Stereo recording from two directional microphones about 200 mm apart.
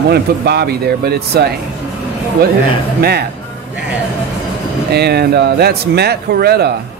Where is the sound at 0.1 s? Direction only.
55° right (ahead or behind).